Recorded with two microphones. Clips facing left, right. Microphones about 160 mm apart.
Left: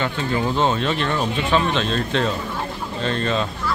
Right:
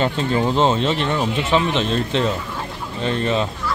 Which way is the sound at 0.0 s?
25° right (ahead or behind).